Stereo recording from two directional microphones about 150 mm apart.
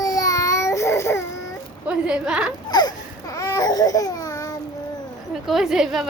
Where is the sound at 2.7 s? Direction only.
25° left (ahead or behind).